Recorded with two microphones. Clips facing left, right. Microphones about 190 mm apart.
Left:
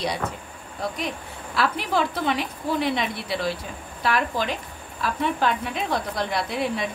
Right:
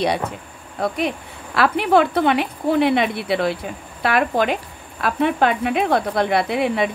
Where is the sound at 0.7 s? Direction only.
60° right (ahead or behind).